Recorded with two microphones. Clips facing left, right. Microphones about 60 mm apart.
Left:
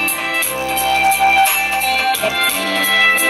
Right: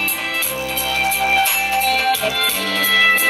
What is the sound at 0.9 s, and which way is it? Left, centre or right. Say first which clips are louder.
Music: left 6 dB; left.